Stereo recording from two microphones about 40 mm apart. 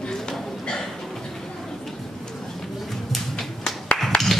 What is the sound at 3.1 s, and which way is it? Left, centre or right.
Music, centre.